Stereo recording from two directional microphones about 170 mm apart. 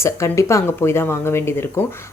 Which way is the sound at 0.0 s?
15° left (ahead or behind).